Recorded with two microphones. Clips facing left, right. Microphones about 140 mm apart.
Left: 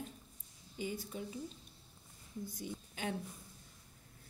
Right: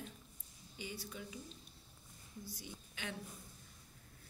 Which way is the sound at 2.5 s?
45° left (ahead or behind).